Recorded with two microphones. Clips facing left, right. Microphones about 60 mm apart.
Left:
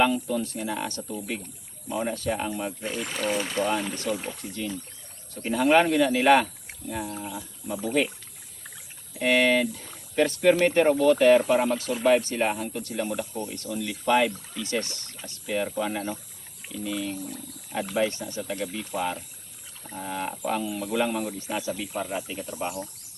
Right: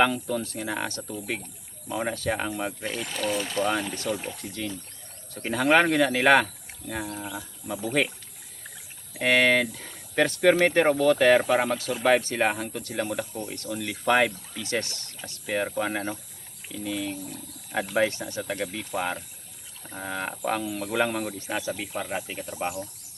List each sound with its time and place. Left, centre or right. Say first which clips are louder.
0.0 s speech: even; right
3.0 s speech: left 1 dB; centre
5.4 s speech: left 1 dB; right
6.9 s speech: even; right
9.1 s speech: even; right
10.5 s speech: left 1 dB; right
17.9 s speech: right 1 dB; right